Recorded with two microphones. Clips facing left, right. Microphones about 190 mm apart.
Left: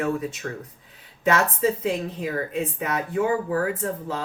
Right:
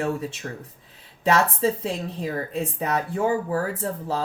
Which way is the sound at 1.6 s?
35° right (ahead or behind).